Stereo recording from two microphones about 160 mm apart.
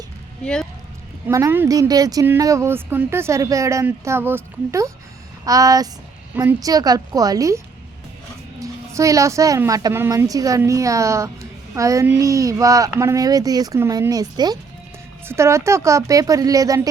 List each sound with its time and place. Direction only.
0.4 s speech: 5° left (ahead or behind)
1.3 s speech: 20° right (ahead or behind)